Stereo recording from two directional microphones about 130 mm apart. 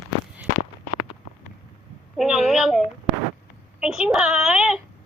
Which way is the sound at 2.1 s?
Centre (ahead or behind).